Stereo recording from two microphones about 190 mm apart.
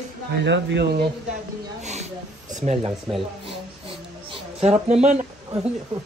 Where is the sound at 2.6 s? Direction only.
35° right (ahead or behind).